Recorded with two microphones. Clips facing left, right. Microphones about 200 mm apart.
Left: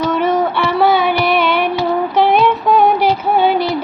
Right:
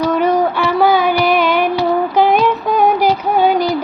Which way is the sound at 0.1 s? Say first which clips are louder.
Right 1 dB; 45° right (ahead or behind).